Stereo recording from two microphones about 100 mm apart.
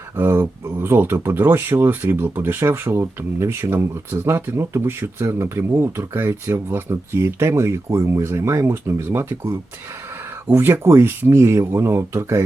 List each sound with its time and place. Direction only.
0.2 s speech: 25° right (ahead or behind)